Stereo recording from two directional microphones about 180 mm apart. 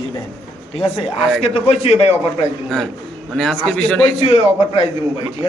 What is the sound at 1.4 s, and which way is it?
Speech, 35° left (ahead or behind).